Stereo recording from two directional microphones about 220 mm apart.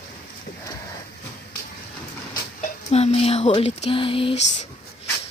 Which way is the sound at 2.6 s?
30° left (ahead or behind).